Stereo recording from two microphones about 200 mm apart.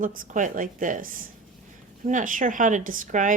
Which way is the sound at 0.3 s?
40° right (ahead or behind).